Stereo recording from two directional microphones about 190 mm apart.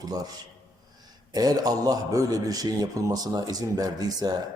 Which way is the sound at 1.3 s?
20° right (ahead or behind).